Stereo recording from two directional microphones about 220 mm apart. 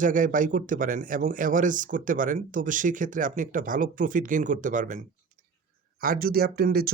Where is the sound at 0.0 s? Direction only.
35° right (ahead or behind).